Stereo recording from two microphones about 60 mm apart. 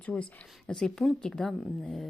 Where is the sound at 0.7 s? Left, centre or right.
Centre.